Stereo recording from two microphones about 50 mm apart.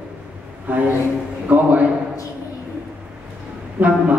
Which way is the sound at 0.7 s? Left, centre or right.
Right.